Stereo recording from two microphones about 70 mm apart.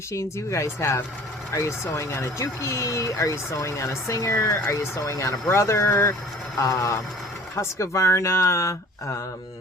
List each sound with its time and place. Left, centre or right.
0.1 s speech: left
6.6 s speech: left